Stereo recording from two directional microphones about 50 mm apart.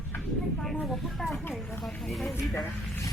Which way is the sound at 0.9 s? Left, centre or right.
Centre.